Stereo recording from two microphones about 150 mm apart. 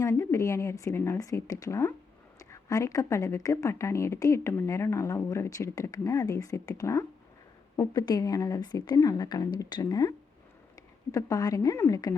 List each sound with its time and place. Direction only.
0.0 s a woman's voice: 20° left (ahead or behind)